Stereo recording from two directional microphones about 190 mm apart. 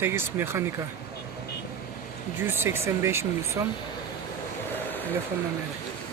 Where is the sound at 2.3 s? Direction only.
10° right (ahead or behind).